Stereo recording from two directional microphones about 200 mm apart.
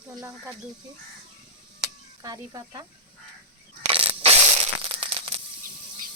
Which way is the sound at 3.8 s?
30° right (ahead or behind).